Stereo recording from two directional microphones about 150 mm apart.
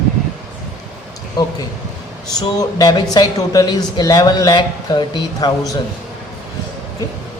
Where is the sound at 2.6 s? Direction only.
25° left (ahead or behind).